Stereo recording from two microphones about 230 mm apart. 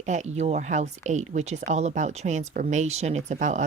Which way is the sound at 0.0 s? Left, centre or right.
Right.